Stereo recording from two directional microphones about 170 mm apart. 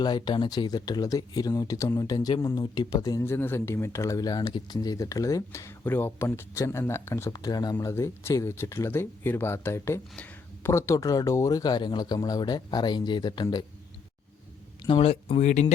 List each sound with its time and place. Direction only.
0.0 s speech: 25° left (ahead or behind)
14.8 s speech: 35° left (ahead or behind)